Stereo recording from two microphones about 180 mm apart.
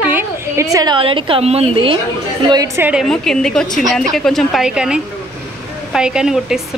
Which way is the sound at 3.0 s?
Centre (ahead or behind).